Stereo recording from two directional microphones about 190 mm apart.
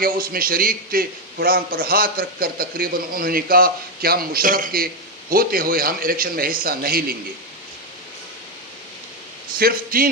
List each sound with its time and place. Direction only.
0.0 s a man's voice: 50° right (ahead or behind)
9.6 s a man's voice: 50° right (ahead or behind)